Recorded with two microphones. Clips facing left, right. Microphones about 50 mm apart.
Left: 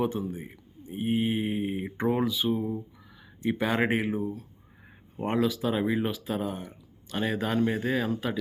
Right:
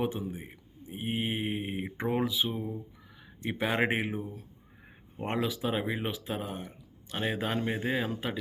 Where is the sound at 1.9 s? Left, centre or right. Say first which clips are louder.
Left 3 dB; centre.